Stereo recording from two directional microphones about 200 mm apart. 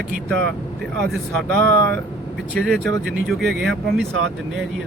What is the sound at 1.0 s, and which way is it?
Speech, 5° left (ahead or behind).